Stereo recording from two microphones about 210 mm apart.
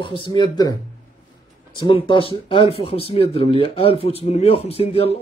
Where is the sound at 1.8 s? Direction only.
25° left (ahead or behind).